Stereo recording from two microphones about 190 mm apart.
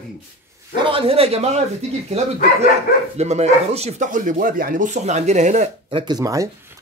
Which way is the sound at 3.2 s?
35° right (ahead or behind).